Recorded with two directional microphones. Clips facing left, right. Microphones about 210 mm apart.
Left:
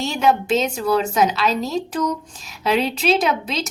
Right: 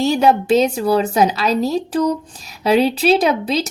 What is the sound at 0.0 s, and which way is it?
Speech, 35° right (ahead or behind).